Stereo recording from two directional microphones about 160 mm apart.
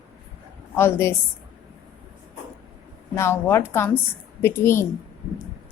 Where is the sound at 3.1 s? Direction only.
15° left (ahead or behind).